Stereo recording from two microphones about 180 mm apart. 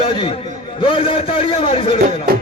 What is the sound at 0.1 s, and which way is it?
A man's voice, 30° left (ahead or behind).